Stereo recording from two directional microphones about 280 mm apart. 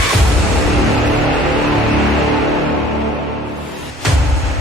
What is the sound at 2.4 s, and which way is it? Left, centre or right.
Music, centre.